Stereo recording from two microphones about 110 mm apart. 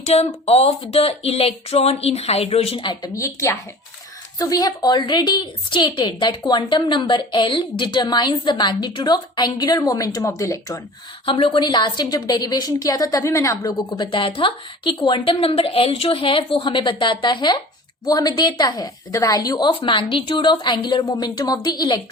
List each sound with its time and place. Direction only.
0.0 s speech: 75° left (ahead or behind)
2.8 s a woman's voice: 40° left (ahead or behind)
11.3 s a woman's voice: 50° left (ahead or behind); by 14.1 s 35° left (ahead or behind)
14.1 s a woman's voice: 50° left (ahead or behind)